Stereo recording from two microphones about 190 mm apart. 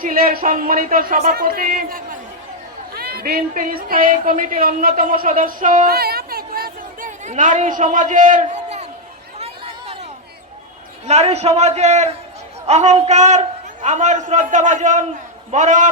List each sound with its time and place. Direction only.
0.0 s speech: 50° right (ahead or behind)
9.4 s chatter: 25° right (ahead or behind)
11.0 s a man's voice: 35° right (ahead or behind)